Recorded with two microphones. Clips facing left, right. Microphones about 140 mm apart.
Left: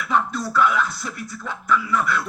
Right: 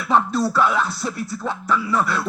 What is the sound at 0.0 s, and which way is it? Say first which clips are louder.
Speech: right 4 dB; 30° right (ahead or behind).